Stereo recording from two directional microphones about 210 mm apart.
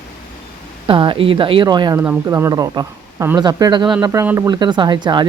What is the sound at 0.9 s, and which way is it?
Speech, 25° right (ahead or behind).